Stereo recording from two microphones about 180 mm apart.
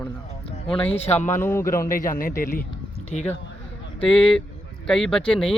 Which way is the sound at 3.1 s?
40° left (ahead or behind).